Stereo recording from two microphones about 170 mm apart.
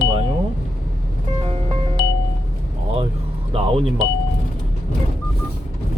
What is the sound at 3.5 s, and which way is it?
Speech, 35° right (ahead or behind).